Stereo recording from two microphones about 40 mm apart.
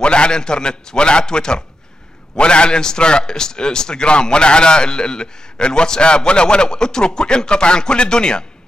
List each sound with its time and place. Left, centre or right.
0.0 s a man's voice: left